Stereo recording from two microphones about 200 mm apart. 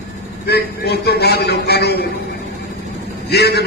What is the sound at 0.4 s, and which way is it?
A man's voice, 55° left (ahead or behind).